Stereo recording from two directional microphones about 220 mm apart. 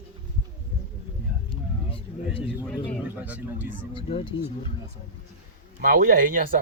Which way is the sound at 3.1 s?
5° right (ahead or behind).